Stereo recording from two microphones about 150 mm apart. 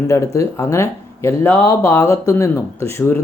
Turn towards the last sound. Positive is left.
turn(degrees=15)  # may be behind; listen again after turning